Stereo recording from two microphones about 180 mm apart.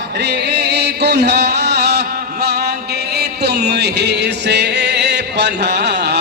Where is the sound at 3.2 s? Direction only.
65° right (ahead or behind).